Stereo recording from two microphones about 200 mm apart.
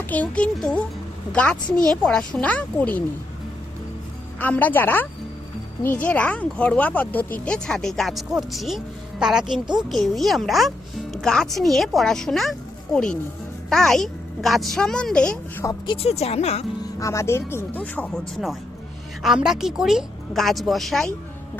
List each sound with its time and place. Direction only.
0.1 s speech: 5° left (ahead or behind)
4.4 s speech: 10° left (ahead or behind)
9.5 s a woman's voice: 20° right (ahead or behind)
9.9 s speech: centre (ahead or behind)
15.6 s speech: 25° left (ahead or behind)
16.8 s speech: 15° left (ahead or behind)